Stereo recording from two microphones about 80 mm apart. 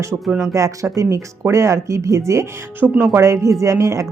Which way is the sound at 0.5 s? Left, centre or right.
Right.